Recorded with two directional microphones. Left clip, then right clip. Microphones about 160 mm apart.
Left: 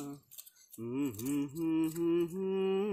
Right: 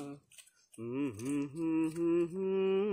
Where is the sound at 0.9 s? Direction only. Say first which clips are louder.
Left 1 dB; 65° left (ahead or behind).